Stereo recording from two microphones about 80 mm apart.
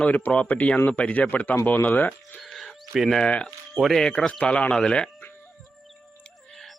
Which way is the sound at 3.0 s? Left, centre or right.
Centre.